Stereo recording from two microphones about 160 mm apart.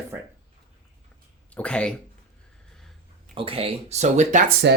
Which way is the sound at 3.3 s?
35° right (ahead or behind).